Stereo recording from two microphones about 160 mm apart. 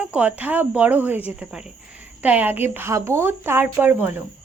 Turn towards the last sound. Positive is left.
turn(degrees=-15)  # may be behind; listen again after turning